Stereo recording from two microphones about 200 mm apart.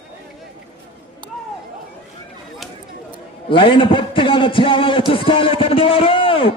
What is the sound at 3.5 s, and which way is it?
A man's voice, 25° left (ahead or behind).